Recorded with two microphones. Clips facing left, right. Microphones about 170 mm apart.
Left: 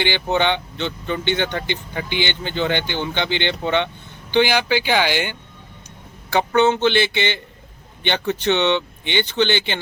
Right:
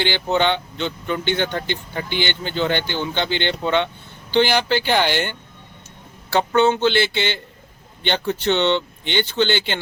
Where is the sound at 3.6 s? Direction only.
60° left (ahead or behind).